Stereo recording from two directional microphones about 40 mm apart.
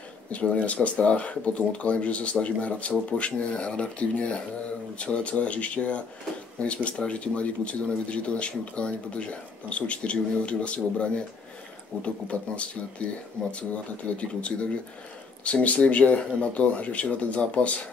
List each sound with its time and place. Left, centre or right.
0.3 s speech: left
14.1 s speech: left